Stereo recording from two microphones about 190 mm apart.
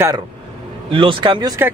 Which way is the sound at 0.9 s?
25° right (ahead or behind).